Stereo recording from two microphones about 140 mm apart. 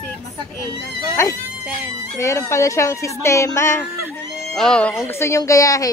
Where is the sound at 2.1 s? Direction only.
20° left (ahead or behind).